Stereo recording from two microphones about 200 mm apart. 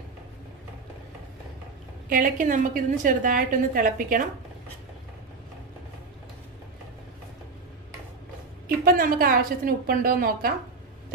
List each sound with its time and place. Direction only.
2.0 s a woman's voice: 40° right (ahead or behind)
8.6 s a woman's voice: 45° right (ahead or behind)